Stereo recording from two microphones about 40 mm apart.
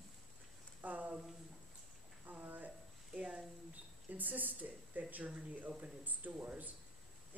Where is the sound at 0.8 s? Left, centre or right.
Right.